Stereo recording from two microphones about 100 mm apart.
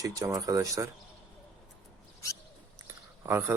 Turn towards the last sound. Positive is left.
turn(degrees=-25)  # may be behind; listen again after turning